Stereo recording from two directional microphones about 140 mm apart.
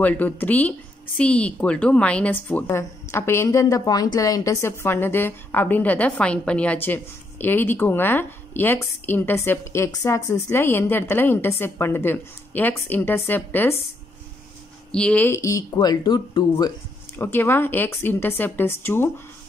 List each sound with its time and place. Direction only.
0.0 s speech: 10° left (ahead or behind)
14.9 s speech: 5° left (ahead or behind); by 16.7 s 30° left (ahead or behind)
17.2 s speech: 15° left (ahead or behind)